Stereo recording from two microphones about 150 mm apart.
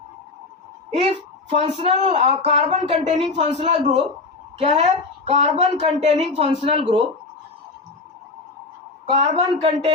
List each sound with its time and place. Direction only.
1.5 s a woman's voice: 40° right (ahead or behind)
3.3 s a woman's voice: 45° right (ahead or behind)
9.0 s speech: 45° right (ahead or behind)